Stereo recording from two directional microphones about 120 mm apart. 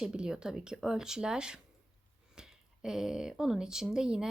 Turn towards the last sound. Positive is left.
turn(degrees=-5)  # may be behind; listen again after turning